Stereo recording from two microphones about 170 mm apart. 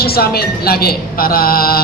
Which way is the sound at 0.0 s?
65° left (ahead or behind).